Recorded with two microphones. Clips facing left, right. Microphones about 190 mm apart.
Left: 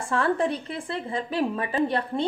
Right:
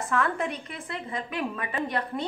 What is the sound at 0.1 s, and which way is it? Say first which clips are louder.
A woman's voice: left 5 dB; 30° left (ahead or behind).